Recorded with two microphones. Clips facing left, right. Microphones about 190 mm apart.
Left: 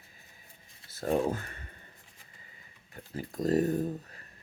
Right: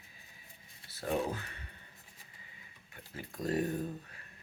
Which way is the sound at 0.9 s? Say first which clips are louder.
Left 5 dB; 45° left (ahead or behind).